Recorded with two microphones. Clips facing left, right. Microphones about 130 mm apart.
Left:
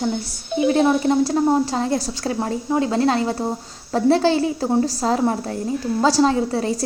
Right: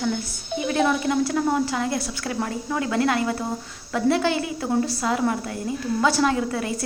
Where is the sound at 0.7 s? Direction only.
30° left (ahead or behind).